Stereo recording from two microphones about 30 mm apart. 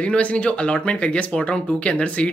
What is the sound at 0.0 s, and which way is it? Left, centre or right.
Speech, left.